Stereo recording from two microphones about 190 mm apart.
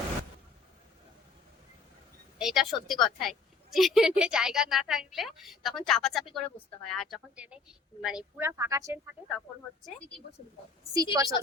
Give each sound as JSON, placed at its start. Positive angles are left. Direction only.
{"t": 2.4, "sound": "a woman's voice", "side_deg": 0}
{"t": 10.9, "sound": "a woman's voice", "side_deg": -20}